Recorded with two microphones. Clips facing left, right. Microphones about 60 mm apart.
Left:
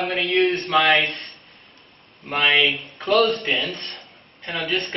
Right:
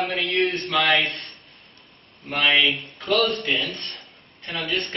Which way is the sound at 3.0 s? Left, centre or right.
Centre.